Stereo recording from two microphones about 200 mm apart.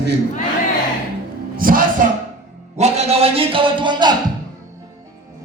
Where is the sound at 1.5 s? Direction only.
45° right (ahead or behind).